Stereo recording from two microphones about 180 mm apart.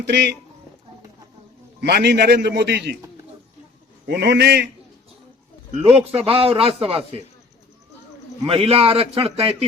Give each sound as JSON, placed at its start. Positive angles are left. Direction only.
{"t": 0.0, "sound": "a man's voice", "side_deg": -70}
{"t": 1.8, "sound": "a man's voice", "side_deg": -65}
{"t": 4.0, "sound": "a man's voice", "side_deg": -65}
{"t": 6.0, "sound": "speech", "side_deg": -35}
{"t": 8.4, "sound": "speech", "side_deg": -30}